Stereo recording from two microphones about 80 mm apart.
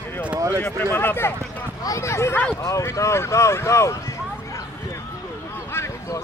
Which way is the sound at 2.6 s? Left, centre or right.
Left.